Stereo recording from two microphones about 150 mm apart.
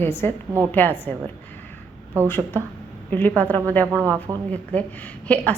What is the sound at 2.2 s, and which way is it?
A woman's voice, 15° left (ahead or behind).